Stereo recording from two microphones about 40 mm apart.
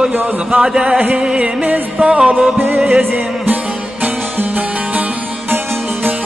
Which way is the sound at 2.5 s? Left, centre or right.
Right.